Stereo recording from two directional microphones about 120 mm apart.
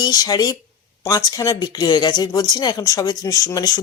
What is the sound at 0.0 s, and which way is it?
Speech, 35° left (ahead or behind).